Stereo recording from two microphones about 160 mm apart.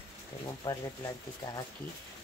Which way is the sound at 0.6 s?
25° left (ahead or behind).